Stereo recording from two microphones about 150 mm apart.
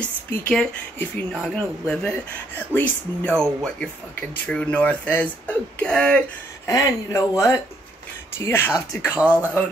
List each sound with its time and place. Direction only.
0.0 s speech: 10° left (ahead or behind)
6.7 s speech: 25° left (ahead or behind)